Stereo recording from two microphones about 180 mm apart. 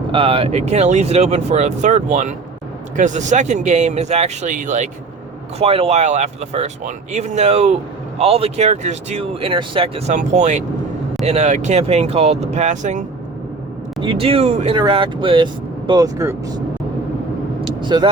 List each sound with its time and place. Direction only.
0.1 s speech: 30° right (ahead or behind); by 4.9 s 45° right (ahead or behind)
5.5 s speech: 35° right (ahead or behind)
10.2 s speech: 40° right (ahead or behind)
14.0 s speech: 30° right (ahead or behind)
17.7 s vehicle: 25° right (ahead or behind)